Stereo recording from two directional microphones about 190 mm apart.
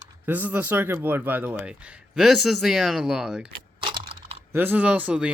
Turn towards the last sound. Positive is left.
turn(degrees=-5)  # may be behind; listen again after turning